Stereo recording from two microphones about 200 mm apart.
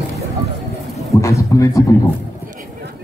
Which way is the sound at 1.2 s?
15° left (ahead or behind).